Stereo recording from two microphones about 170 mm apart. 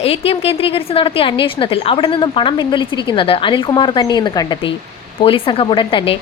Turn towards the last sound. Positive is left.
turn(degrees=30)  # may be behind; listen again after turning